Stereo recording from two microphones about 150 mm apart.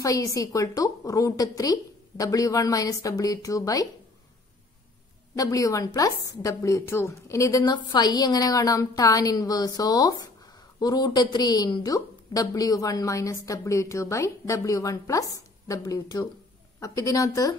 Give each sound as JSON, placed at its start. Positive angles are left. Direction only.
{"t": 0.0, "sound": "a woman's voice", "side_deg": 20}
{"t": 5.3, "sound": "a woman's voice", "side_deg": 25}